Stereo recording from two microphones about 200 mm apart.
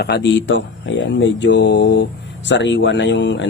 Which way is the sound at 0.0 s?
60° left (ahead or behind).